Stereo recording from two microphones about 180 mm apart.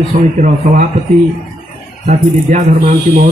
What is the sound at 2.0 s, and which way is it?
A man's voice, 45° right (ahead or behind).